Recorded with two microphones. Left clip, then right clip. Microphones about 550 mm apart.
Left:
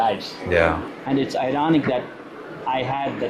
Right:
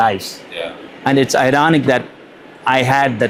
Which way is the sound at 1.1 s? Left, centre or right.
Right.